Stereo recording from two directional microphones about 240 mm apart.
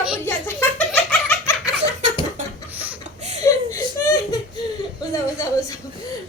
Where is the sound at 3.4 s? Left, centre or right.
Centre.